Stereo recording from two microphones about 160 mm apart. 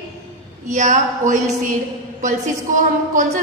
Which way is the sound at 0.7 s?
50° right (ahead or behind).